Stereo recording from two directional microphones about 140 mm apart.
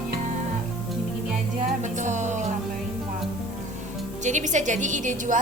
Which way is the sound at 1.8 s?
60° right (ahead or behind).